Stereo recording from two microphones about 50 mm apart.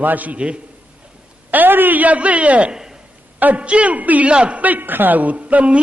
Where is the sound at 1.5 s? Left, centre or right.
Right.